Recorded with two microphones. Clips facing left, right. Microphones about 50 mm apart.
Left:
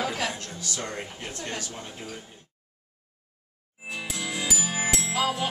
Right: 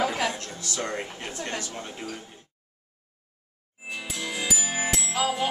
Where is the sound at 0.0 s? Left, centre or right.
Right.